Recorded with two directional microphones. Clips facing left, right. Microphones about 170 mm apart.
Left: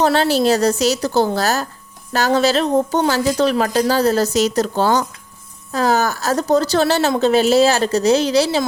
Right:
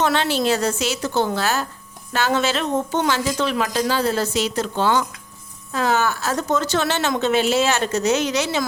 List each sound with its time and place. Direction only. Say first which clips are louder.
0.0 s speech: left 5 dB; 35° left (ahead or behind)